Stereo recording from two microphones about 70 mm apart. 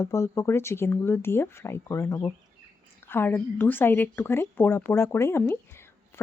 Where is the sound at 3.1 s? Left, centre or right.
Left.